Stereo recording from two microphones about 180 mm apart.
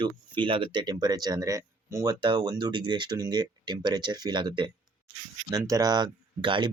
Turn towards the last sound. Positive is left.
turn(degrees=-25)  # may be behind; listen again after turning